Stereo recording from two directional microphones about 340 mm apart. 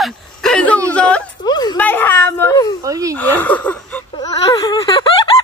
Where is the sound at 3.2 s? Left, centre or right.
Centre.